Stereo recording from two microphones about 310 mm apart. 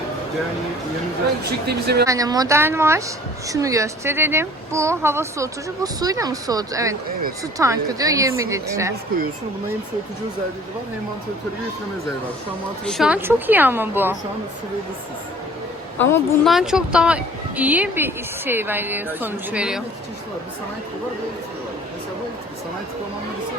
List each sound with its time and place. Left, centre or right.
1.5 s a woman's voice: right
2.0 s a woman's voice: centre
12.8 s a woman's voice: centre
16.0 s a woman's voice: centre